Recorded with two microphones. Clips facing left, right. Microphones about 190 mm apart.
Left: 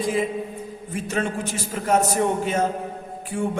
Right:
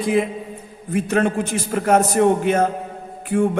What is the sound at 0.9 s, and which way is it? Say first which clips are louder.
A man's voice: right 7 dB; 60° right (ahead or behind).